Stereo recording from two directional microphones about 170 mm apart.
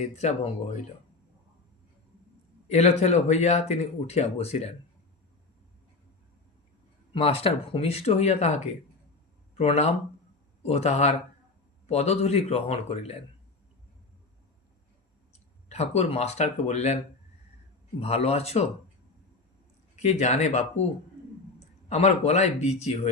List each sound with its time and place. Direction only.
0.0 s speech: 40° left (ahead or behind)
2.6 s speech: 40° left (ahead or behind)
7.1 s speech: 35° left (ahead or behind)
15.7 s speech: 40° left (ahead or behind)
18.0 s speech: 35° left (ahead or behind)
20.0 s speech: 40° left (ahead or behind)
21.8 s speech: 40° left (ahead or behind)